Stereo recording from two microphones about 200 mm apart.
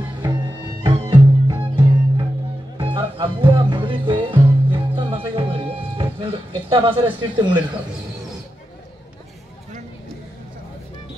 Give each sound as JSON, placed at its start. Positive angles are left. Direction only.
{"t": 0.8, "sound": "music", "side_deg": -25}